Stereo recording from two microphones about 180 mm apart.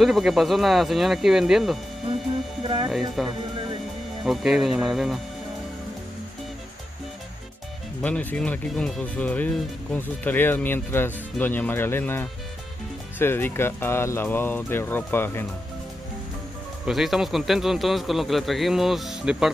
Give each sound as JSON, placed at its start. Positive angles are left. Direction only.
{"t": 0.0, "sound": "speech", "side_deg": 0}
{"t": 2.6, "sound": "speech", "side_deg": -30}
{"t": 2.9, "sound": "speech", "side_deg": 0}
{"t": 8.0, "sound": "speech", "side_deg": 10}
{"t": 16.8, "sound": "speech", "side_deg": 0}